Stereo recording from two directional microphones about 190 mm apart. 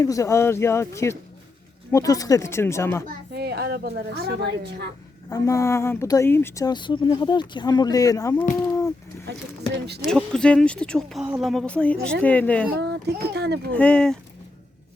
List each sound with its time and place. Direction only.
0.0 s speech: 15° left (ahead or behind)
3.3 s a woman's voice: 60° right (ahead or behind)
5.3 s speech: 15° left (ahead or behind)
9.8 s a woman's voice: 60° right (ahead or behind)
10.1 s speech: 5° left (ahead or behind)
12.8 s a woman's voice: 60° right (ahead or behind)
13.7 s speech: 5° left (ahead or behind)